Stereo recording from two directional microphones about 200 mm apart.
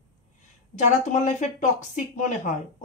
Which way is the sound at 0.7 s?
35° left (ahead or behind).